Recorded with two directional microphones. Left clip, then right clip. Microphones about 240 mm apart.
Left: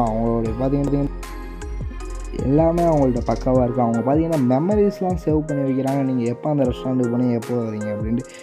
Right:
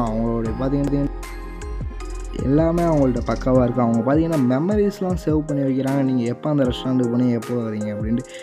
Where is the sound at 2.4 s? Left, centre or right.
Centre.